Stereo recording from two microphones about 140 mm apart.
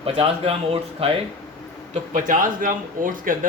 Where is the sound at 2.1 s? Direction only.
70° right (ahead or behind).